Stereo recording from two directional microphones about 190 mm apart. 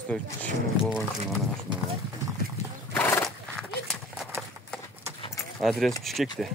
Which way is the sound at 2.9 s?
10° left (ahead or behind).